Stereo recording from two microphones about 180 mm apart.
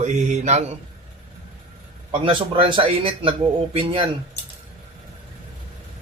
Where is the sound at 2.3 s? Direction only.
30° right (ahead or behind).